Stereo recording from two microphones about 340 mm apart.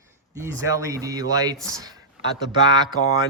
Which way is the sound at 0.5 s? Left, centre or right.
Centre.